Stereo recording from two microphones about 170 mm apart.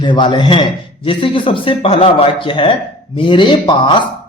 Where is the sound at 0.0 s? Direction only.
25° left (ahead or behind).